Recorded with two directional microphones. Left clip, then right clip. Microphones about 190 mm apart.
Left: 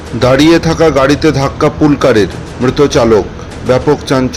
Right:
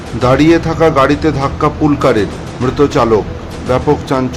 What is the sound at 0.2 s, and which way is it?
A man's voice, 20° left (ahead or behind).